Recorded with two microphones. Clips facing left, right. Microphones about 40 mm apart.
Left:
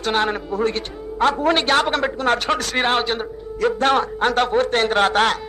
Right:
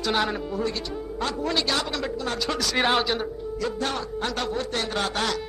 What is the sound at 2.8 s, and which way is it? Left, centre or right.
Speech, left.